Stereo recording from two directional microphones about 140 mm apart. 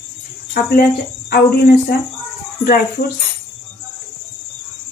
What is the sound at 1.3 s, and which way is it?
Speech, 90° left.